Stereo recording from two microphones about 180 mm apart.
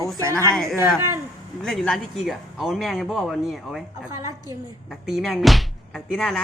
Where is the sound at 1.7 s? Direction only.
Centre (ahead or behind).